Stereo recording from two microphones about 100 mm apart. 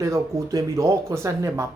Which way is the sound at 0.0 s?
30° right (ahead or behind).